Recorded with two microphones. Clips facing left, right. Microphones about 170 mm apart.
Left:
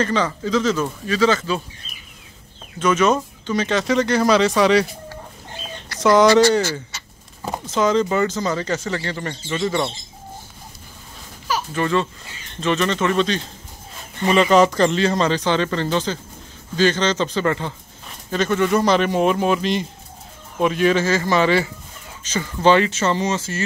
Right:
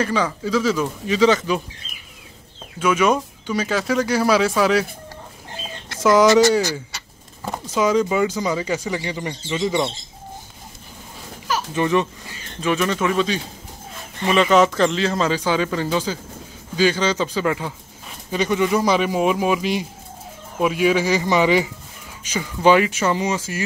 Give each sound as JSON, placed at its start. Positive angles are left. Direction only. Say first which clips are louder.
{"t": 0.0, "sound": "speech", "louder": "left 1 dB", "side_deg": -10}
{"t": 2.8, "sound": "speech", "louder": "left 1 dB", "side_deg": -10}
{"t": 5.9, "sound": "speech", "louder": "even", "side_deg": -5}
{"t": 11.7, "sound": "a man's voice", "louder": "right 2 dB", "side_deg": -15}